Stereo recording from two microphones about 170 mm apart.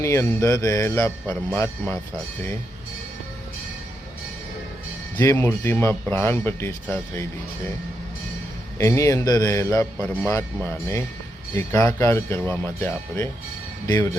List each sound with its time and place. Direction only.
0.0 s speech: 15° left (ahead or behind)
5.1 s speech: 15° left (ahead or behind)
8.8 s a man's voice: 15° left (ahead or behind)